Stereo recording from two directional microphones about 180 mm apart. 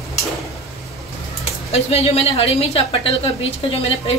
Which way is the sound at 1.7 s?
35° left (ahead or behind).